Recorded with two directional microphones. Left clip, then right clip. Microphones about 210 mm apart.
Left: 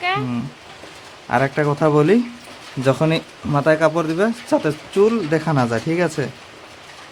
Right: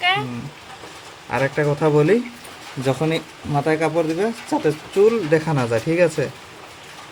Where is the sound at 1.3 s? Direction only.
25° left (ahead or behind).